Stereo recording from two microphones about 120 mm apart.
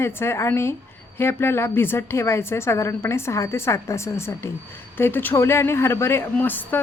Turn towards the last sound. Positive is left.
turn(degrees=15)  # may be behind; listen again after turning